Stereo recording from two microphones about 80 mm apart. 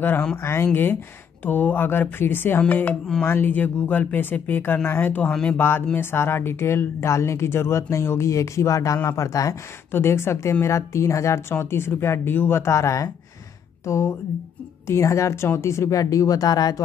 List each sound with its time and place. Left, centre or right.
0.4 s speech: left; by 5.6 s centre
5.6 s speech: left
9.9 s speech: left